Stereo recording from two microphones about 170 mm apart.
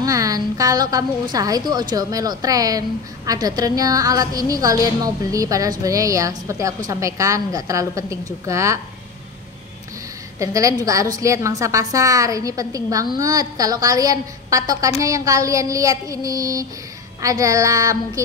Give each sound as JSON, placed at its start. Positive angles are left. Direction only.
{"t": 0.0, "sound": "a woman's voice", "side_deg": -20}
{"t": 10.4, "sound": "a woman's voice", "side_deg": -20}